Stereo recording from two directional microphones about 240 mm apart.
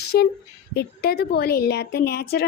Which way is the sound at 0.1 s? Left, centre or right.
Left.